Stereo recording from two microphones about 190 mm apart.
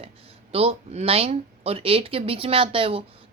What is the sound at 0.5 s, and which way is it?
Speech, 30° right (ahead or behind).